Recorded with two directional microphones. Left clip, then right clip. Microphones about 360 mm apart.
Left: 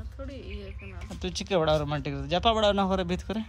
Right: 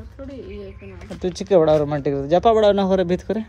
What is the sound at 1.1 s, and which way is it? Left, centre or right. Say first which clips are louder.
Speech: right 11 dB; centre.